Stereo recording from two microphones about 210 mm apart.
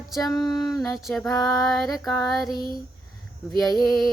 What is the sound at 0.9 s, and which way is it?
Speech, centre (ahead or behind).